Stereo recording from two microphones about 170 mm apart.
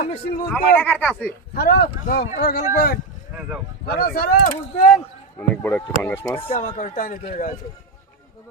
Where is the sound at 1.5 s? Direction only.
70° left (ahead or behind).